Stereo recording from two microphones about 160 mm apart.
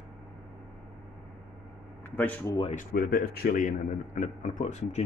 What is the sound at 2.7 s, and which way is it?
A man's voice, 70° left (ahead or behind).